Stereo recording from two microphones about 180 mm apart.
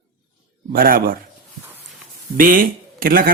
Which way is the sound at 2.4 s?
50° right (ahead or behind).